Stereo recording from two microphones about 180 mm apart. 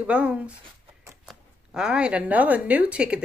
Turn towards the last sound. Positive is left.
turn(degrees=-5)  # may be behind; listen again after turning